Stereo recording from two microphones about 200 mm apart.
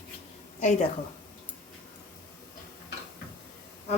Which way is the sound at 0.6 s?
35° left (ahead or behind).